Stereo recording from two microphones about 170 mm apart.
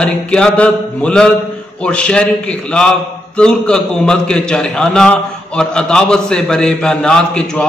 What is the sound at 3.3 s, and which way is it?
A man's voice, 5° left (ahead or behind).